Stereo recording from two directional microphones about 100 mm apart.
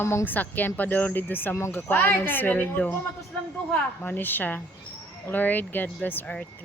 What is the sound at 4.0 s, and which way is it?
Speech, 15° left (ahead or behind).